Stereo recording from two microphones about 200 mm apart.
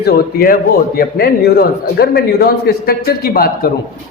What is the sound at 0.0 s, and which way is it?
A man's voice, 50° left (ahead or behind).